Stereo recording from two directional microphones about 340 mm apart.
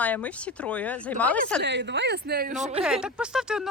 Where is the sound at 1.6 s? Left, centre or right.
Right.